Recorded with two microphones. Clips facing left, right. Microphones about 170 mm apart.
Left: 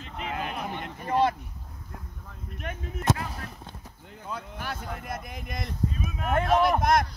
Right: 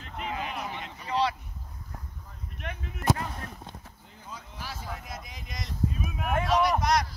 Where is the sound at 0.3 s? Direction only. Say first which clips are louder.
Left 2 dB; 55° left (ahead or behind).